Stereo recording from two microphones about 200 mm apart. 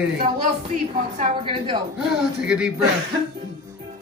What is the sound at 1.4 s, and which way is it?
Speech, 25° right (ahead or behind).